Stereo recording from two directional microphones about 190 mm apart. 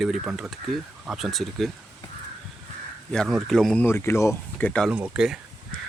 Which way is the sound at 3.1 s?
Centre (ahead or behind).